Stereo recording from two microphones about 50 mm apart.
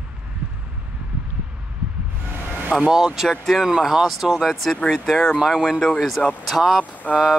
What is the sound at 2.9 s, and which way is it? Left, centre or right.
Speech, centre.